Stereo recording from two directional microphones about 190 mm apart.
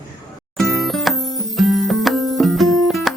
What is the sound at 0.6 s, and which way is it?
Music, centre (ahead or behind).